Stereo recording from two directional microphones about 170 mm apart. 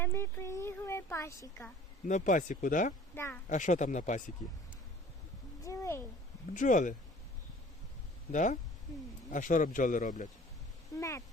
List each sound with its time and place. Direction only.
0.0 s a sound: 15° left (ahead or behind)
2.0 s speech: 45° left (ahead or behind)
3.2 s speech: 15° left (ahead or behind)
3.5 s speech: 45° left (ahead or behind)
5.6 s a sound: 15° left (ahead or behind)
6.5 s speech: 50° left (ahead or behind)
8.3 s speech: 45° left (ahead or behind)
10.9 s cat: 20° left (ahead or behind)